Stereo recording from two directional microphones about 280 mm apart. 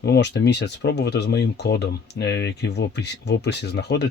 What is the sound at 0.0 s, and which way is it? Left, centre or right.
Speech, left.